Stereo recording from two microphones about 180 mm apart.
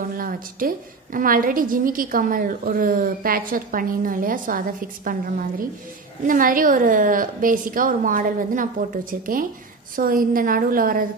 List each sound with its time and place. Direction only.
0.1 s a woman's voice: 50° right (ahead or behind)